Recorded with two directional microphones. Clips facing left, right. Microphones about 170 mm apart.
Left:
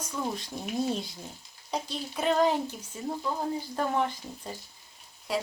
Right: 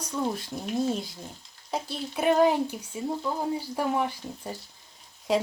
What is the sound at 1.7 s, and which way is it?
Speech, 10° right (ahead or behind).